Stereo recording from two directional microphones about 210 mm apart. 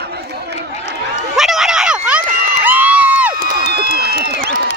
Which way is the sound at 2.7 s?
10° right (ahead or behind).